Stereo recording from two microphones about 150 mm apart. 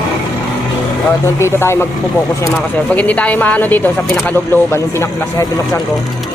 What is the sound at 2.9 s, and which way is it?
Speech, 10° left (ahead or behind).